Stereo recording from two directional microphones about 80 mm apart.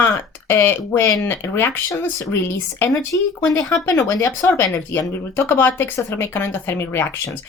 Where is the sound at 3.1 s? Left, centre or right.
Left.